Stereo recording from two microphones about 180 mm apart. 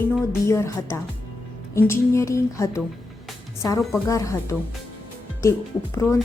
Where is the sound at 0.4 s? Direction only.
15° left (ahead or behind).